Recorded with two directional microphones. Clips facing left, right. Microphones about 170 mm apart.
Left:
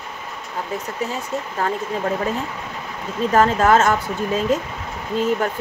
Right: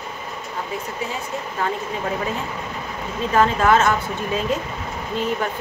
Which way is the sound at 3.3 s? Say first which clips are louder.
Left 2 dB; 40° left (ahead or behind).